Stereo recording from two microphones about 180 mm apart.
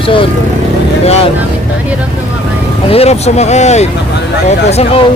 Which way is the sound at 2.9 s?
35° left (ahead or behind).